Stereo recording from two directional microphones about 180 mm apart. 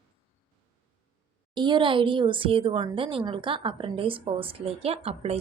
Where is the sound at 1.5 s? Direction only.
25° right (ahead or behind).